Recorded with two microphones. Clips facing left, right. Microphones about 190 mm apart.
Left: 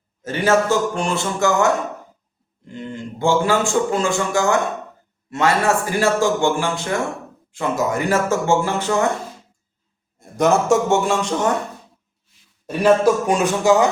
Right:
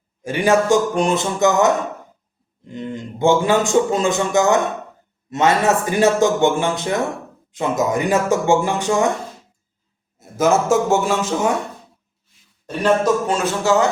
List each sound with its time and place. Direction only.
0.2 s speech: 15° right (ahead or behind)
10.2 s a man's voice: centre (ahead or behind)
12.6 s a man's voice: 10° left (ahead or behind)